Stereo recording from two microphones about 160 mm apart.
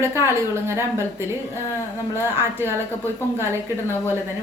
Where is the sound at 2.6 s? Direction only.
15° right (ahead or behind).